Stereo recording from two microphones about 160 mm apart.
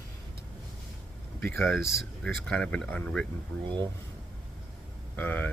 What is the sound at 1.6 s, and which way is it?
Speech, centre (ahead or behind).